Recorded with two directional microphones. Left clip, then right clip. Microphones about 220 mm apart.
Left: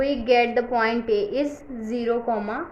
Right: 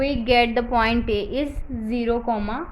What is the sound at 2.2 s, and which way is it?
Speech, 20° right (ahead or behind).